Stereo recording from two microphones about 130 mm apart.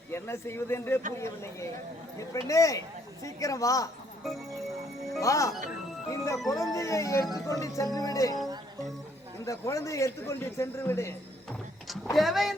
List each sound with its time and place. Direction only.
0.1 s a man's voice: 20° left (ahead or behind)
5.2 s a man's voice: 25° left (ahead or behind)
9.4 s a man's voice: 25° left (ahead or behind)
12.1 s speech: centre (ahead or behind)